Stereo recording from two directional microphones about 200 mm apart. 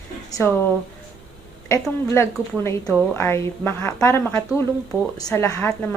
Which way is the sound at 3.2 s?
10° left (ahead or behind).